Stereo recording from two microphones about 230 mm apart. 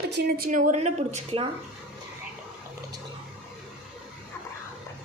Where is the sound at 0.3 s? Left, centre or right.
Right.